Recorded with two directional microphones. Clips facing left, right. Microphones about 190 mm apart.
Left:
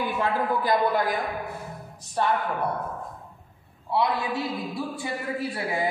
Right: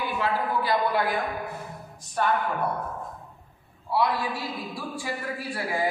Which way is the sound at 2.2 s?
25° left (ahead or behind).